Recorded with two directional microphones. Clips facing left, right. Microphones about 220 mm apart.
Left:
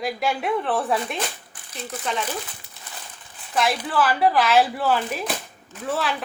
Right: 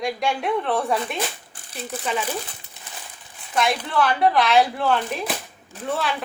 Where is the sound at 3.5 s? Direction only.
Centre (ahead or behind).